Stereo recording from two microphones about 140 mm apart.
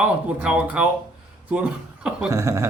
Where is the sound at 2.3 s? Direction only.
20° right (ahead or behind).